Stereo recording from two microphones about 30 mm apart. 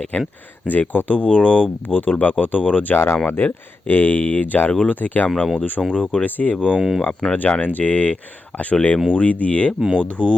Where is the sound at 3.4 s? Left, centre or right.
Left.